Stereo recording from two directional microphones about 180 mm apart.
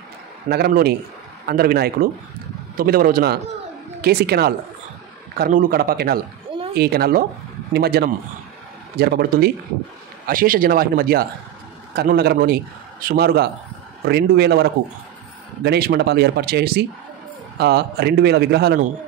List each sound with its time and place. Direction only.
0.5 s a man's voice: 60° right (ahead or behind)